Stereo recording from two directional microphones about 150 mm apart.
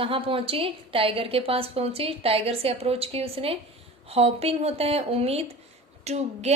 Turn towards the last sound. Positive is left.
turn(degrees=-45)  # may be behind; listen again after turning